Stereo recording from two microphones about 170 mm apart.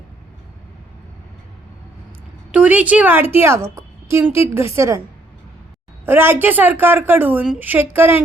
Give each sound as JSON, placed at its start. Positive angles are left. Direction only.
{"t": 2.5, "sound": "a woman's voice", "side_deg": -10}
{"t": 6.1, "sound": "a woman's voice", "side_deg": -15}